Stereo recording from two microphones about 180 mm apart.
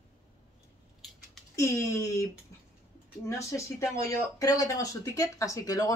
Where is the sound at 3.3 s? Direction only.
15° left (ahead or behind).